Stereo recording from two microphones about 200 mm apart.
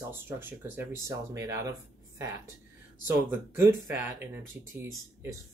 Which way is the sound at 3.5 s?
10° right (ahead or behind).